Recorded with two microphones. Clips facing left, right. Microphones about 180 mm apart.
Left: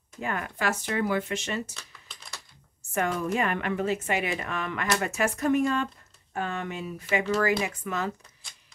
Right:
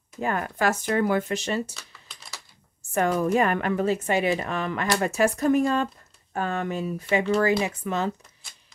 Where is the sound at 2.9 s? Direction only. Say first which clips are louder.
Right 5 dB; 40° right (ahead or behind).